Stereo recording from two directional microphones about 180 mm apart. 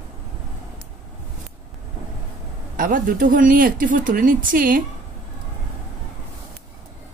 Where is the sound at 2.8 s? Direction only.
50° right (ahead or behind).